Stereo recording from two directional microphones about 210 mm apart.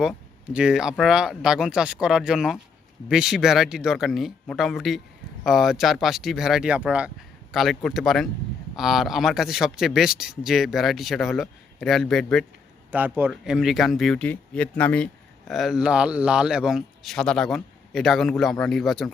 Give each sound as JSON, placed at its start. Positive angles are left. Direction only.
{"t": 0.0, "sound": "speech", "side_deg": -5}